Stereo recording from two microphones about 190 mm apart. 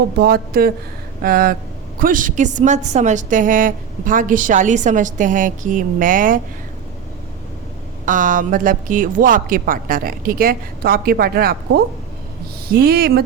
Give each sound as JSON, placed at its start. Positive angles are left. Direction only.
{"t": 0.2, "sound": "a woman's voice", "side_deg": -55}
{"t": 8.0, "sound": "a woman's voice", "side_deg": -45}